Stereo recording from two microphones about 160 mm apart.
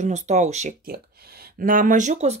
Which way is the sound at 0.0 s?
45° right (ahead or behind).